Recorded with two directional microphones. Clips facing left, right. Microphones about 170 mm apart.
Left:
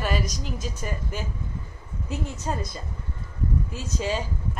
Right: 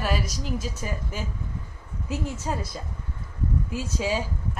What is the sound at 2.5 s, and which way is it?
Speech, 5° right (ahead or behind).